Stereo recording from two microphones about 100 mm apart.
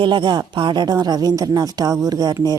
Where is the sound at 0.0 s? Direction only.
50° right (ahead or behind).